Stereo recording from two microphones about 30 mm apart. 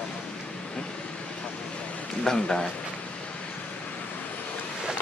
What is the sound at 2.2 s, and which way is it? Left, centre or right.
Speech, centre.